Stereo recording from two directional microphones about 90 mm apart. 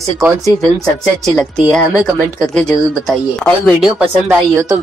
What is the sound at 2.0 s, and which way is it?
Speech, 5° left (ahead or behind).